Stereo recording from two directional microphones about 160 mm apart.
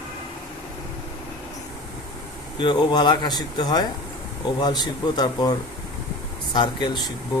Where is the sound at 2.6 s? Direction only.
30° left (ahead or behind).